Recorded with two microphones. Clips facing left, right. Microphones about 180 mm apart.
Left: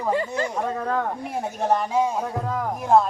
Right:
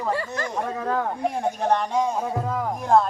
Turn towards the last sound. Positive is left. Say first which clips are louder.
# left 1 dB
turn(degrees=5)  # may be behind; listen again after turning